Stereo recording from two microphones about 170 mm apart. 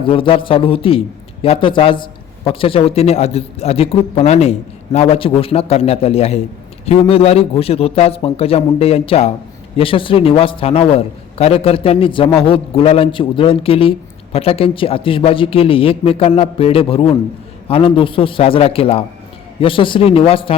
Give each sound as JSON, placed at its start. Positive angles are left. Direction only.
{"t": 0.0, "sound": "a man's voice", "side_deg": 30}